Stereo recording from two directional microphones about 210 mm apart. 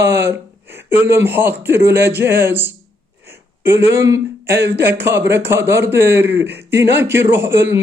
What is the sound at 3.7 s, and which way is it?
A man's voice, 10° right (ahead or behind).